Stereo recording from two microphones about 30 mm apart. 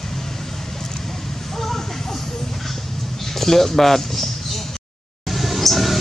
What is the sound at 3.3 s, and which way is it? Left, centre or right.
Speech, centre.